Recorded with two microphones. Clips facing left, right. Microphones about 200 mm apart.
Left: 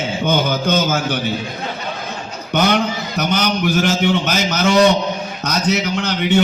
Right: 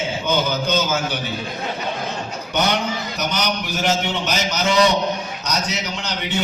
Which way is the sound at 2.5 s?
55° left (ahead or behind).